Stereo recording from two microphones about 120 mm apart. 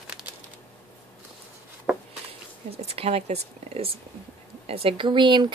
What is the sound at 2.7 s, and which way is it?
A woman's voice, 55° right (ahead or behind).